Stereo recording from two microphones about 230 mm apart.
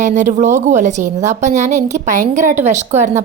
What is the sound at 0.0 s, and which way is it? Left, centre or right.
A woman's voice, right.